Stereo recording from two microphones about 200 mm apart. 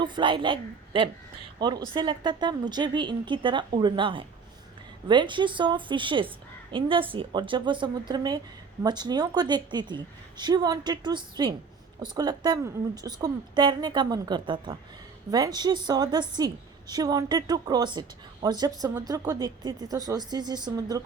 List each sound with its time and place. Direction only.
0.0 s a woman's voice: 25° right (ahead or behind)